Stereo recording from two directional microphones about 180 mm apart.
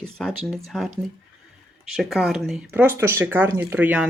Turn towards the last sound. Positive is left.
turn(degrees=-10)  # may be behind; listen again after turning